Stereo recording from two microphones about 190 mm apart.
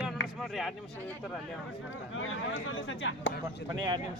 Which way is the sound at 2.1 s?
90° left.